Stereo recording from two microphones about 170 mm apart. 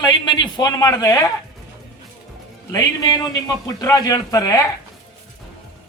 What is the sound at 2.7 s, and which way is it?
A man's voice, 20° left (ahead or behind).